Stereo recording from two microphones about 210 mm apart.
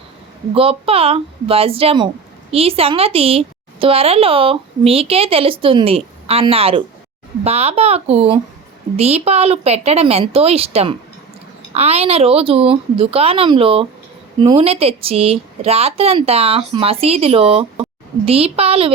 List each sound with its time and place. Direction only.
0.5 s a woman's voice: 25° right (ahead or behind)